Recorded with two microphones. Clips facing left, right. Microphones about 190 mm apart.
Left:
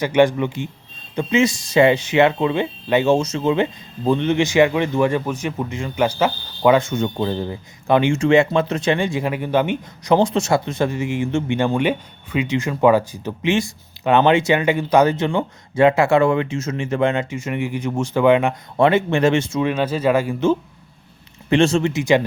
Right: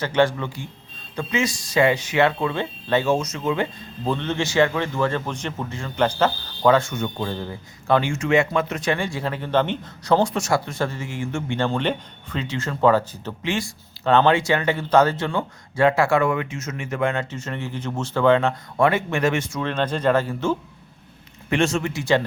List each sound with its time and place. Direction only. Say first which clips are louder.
0.0 s speech: left 5 dB; 15° left (ahead or behind)
19.6 s speech: right 1 dB; 10° left (ahead or behind)
21.5 s speech: left 6 dB; 30° left (ahead or behind)